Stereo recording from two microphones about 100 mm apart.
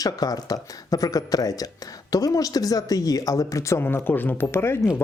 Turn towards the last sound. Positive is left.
turn(degrees=25)  # may be behind; listen again after turning